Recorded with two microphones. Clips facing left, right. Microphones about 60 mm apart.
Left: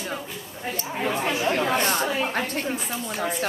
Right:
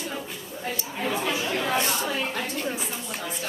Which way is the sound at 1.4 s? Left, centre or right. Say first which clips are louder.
Left 4 dB; left.